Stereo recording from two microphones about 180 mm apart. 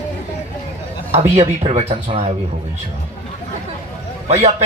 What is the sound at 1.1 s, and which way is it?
Speech, 35° right (ahead or behind).